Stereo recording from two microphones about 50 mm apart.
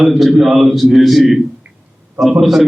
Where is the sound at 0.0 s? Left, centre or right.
Centre.